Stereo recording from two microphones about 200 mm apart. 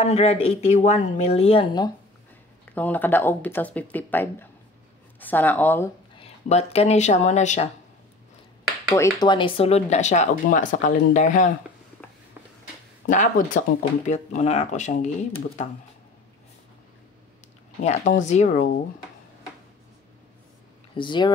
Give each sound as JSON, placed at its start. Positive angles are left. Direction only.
{"t": 0.0, "sound": "speech", "side_deg": 30}
{"t": 2.7, "sound": "speech", "side_deg": 10}
{"t": 6.1, "sound": "speech", "side_deg": 30}
{"t": 8.9, "sound": "speech", "side_deg": 15}
{"t": 13.1, "sound": "speech", "side_deg": 40}
{"t": 17.8, "sound": "speech", "side_deg": 35}
{"t": 20.9, "sound": "speech", "side_deg": 25}